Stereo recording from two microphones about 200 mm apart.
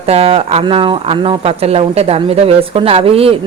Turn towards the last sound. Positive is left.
turn(degrees=-30)  # may be behind; listen again after turning